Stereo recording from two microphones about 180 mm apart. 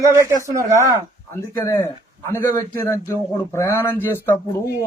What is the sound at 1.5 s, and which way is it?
A man's voice, 15° left (ahead or behind).